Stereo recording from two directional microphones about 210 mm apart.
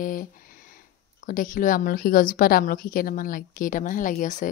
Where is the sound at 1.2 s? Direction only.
40° left (ahead or behind).